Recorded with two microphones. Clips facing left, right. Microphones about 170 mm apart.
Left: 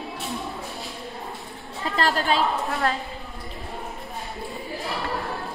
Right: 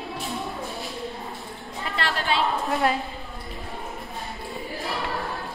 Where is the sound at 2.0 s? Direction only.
40° left (ahead or behind).